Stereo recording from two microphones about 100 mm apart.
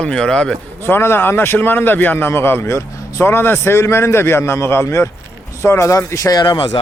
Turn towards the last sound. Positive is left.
turn(degrees=55)  # may be behind; listen again after turning